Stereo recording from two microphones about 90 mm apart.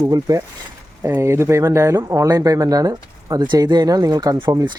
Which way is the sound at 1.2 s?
30° right (ahead or behind).